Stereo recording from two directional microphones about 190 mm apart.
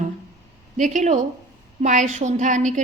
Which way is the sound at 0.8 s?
40° right (ahead or behind).